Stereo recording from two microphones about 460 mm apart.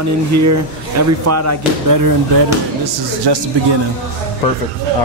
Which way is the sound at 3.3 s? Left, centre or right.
Right.